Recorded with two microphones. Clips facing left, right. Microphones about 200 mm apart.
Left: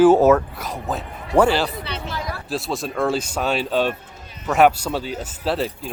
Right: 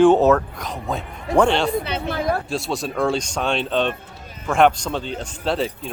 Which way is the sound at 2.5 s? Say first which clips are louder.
Right 1 dB; centre (ahead or behind).